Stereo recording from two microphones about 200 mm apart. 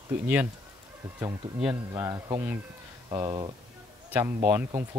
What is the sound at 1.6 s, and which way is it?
Speech, 5° right (ahead or behind).